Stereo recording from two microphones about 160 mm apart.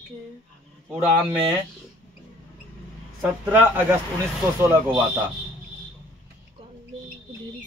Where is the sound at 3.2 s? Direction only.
10° right (ahead or behind).